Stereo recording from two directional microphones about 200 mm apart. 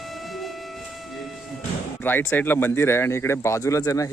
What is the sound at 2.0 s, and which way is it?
Speech, 10° left (ahead or behind).